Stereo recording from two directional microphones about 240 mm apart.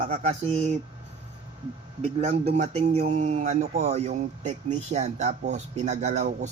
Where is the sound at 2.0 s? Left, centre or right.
Right.